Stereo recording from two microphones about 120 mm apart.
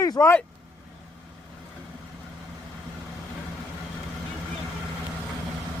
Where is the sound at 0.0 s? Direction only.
30° left (ahead or behind).